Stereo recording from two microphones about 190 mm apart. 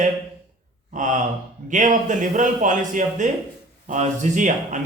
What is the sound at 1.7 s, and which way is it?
A man's voice, 40° right (ahead or behind).